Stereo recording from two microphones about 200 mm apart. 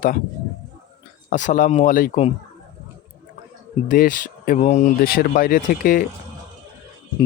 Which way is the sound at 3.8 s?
40° left (ahead or behind).